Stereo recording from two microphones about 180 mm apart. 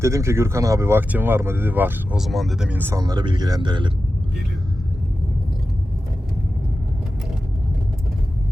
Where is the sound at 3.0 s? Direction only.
25° right (ahead or behind).